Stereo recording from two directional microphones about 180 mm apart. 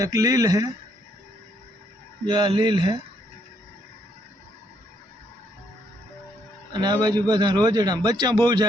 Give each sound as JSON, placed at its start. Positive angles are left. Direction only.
{"t": 0.0, "sound": "a man's voice", "side_deg": -20}
{"t": 2.3, "sound": "a man's voice", "side_deg": -25}
{"t": 6.7, "sound": "a man's voice", "side_deg": -25}